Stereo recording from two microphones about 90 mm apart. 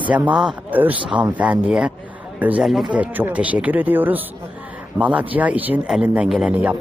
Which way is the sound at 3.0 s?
20° right (ahead or behind).